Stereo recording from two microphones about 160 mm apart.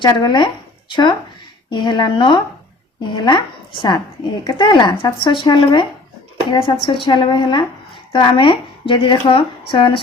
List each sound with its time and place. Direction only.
0.0 s speech: 30° left (ahead or behind)